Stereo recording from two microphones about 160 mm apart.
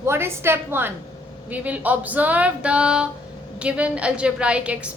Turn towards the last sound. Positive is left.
turn(degrees=-5)  # may be behind; listen again after turning